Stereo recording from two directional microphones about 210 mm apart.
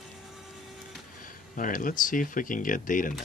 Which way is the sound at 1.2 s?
40° left (ahead or behind).